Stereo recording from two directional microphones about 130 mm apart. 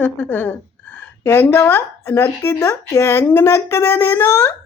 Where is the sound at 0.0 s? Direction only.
15° left (ahead or behind).